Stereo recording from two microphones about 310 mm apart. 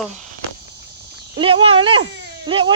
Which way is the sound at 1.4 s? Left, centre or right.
Centre.